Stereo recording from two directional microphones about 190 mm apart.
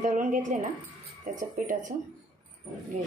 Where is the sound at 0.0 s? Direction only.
45° right (ahead or behind).